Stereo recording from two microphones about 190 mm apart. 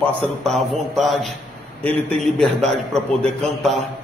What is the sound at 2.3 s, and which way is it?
A man's voice, centre (ahead or behind).